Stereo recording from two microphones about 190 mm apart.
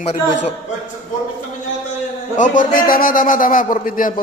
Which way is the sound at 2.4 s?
45° left (ahead or behind).